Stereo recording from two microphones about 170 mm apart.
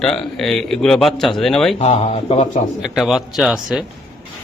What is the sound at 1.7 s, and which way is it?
Speech, 35° left (ahead or behind).